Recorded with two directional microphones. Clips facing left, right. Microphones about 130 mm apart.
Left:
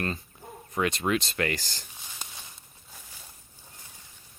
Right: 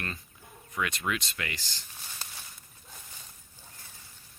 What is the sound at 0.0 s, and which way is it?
Speech, 35° left (ahead or behind).